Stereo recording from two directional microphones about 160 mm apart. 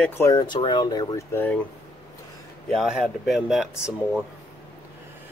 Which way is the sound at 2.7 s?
Centre (ahead or behind).